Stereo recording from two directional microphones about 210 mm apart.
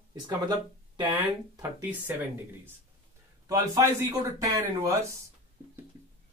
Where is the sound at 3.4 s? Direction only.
15° right (ahead or behind).